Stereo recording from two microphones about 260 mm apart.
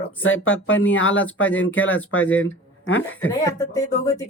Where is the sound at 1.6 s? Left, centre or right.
Left.